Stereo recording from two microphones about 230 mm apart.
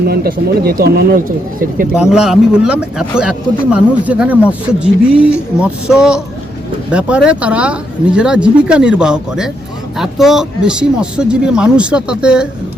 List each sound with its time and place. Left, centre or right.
0.0 s speech: right
1.9 s speech: centre